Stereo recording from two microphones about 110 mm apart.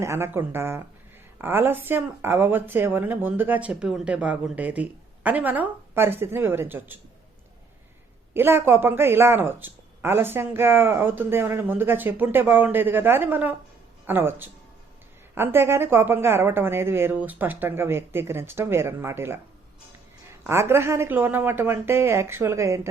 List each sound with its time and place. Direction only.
0.0 s speech: 25° right (ahead or behind)
8.3 s speech: 20° right (ahead or behind)
20.5 s speech: 25° right (ahead or behind)